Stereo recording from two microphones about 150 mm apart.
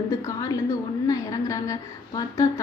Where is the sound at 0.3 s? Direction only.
20° left (ahead or behind).